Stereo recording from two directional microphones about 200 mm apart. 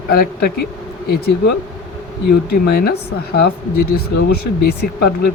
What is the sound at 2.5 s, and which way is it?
Speech, 50° left (ahead or behind).